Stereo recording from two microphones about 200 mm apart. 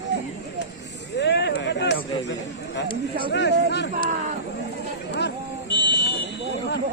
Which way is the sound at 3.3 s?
55° left (ahead or behind).